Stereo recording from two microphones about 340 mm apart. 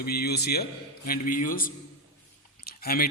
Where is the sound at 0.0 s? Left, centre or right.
Left.